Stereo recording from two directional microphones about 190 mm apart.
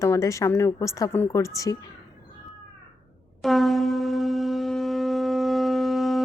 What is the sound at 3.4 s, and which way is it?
Shofar, centre (ahead or behind).